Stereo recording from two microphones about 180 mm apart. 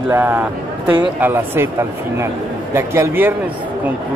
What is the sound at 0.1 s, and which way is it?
Speech, 10° right (ahead or behind).